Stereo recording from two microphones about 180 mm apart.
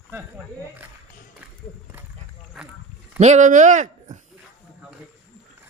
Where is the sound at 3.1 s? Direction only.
40° right (ahead or behind).